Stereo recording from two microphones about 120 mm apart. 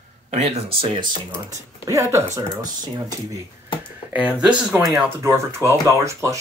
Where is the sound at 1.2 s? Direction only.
25° right (ahead or behind).